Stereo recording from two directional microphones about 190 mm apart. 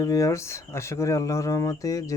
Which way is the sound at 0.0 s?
15° left (ahead or behind).